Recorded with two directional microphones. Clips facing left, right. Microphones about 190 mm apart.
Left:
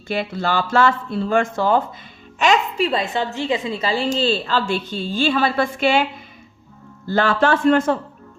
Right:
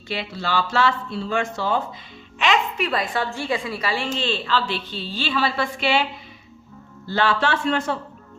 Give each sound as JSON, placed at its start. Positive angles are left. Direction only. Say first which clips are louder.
{"t": 0.1, "sound": "speech", "louder": "left 4 dB", "side_deg": 50}
{"t": 2.8, "sound": "a woman's voice", "louder": "left 3 dB", "side_deg": 25}
{"t": 7.1, "sound": "speech", "louder": "left 4 dB", "side_deg": 50}